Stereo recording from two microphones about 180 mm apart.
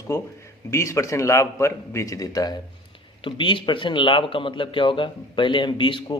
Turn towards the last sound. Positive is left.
turn(degrees=25)  # may be behind; listen again after turning